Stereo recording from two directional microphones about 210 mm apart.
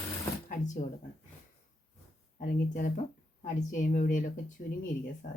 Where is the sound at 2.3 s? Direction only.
40° left (ahead or behind).